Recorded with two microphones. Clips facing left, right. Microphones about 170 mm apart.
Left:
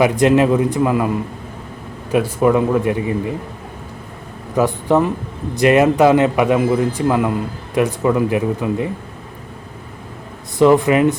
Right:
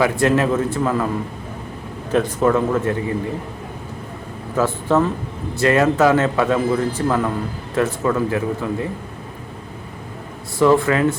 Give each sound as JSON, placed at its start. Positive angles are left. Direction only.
{"t": 0.0, "sound": "a man's voice", "side_deg": 20}
{"t": 2.1, "sound": "a man's voice", "side_deg": 10}
{"t": 4.5, "sound": "a man's voice", "side_deg": 15}
{"t": 10.6, "sound": "a man's voice", "side_deg": 15}